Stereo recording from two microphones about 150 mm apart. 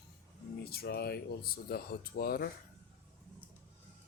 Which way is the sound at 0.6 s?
90° left.